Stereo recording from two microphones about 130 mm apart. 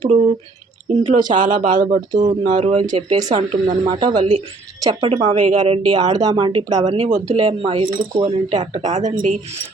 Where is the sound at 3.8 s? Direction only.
40° right (ahead or behind).